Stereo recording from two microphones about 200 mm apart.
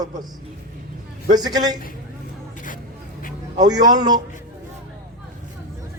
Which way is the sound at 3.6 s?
20° right (ahead or behind).